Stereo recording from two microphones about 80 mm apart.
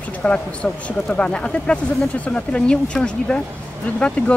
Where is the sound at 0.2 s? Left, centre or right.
Centre.